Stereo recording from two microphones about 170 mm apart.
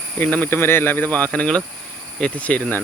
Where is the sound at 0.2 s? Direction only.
10° left (ahead or behind).